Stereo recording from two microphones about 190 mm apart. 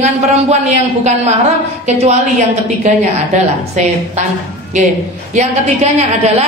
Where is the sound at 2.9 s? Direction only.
40° right (ahead or behind).